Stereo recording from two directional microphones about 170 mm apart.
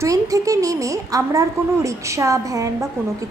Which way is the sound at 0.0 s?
20° right (ahead or behind).